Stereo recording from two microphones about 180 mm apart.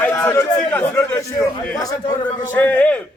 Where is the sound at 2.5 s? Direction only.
10° left (ahead or behind).